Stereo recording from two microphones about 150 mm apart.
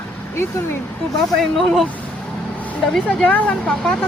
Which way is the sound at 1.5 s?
Centre (ahead or behind).